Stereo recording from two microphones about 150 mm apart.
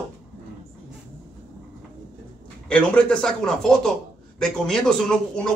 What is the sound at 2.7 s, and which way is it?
Speech, 5° left (ahead or behind).